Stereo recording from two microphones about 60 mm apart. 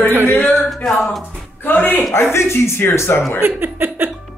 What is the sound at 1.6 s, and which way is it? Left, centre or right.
Speech, left.